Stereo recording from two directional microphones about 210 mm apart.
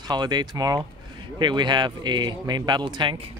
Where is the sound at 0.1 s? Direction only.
20° right (ahead or behind).